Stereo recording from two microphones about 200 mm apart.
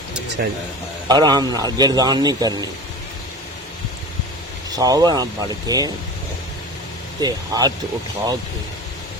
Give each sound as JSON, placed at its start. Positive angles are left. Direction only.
{"t": 0.4, "sound": "speech", "side_deg": -55}
{"t": 1.0, "sound": "a man's voice", "side_deg": -20}
{"t": 4.7, "sound": "a man's voice", "side_deg": -20}
{"t": 7.2, "sound": "a man's voice", "side_deg": -20}